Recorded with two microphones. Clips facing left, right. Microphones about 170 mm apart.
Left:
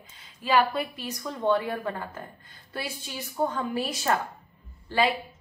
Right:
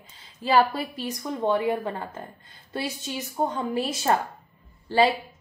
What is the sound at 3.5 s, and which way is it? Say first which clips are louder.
Speech: right 2 dB; 20° right (ahead or behind).